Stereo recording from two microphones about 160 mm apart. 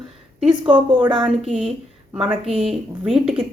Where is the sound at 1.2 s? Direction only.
5° right (ahead or behind).